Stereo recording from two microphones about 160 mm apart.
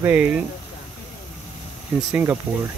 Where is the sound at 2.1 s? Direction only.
15° right (ahead or behind).